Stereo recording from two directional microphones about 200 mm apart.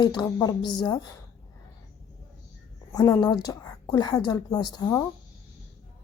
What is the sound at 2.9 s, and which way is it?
Speech, 20° left (ahead or behind).